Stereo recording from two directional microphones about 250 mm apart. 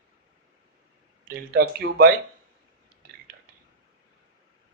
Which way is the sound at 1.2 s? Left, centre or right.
Right.